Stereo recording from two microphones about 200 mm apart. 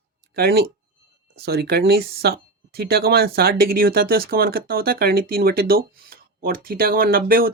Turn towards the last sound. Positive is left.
turn(degrees=-45)  # may be behind; listen again after turning